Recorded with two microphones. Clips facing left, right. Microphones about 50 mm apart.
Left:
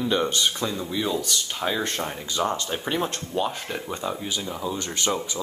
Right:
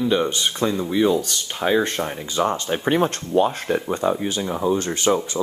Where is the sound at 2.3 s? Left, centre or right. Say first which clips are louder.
Right 4 dB; right.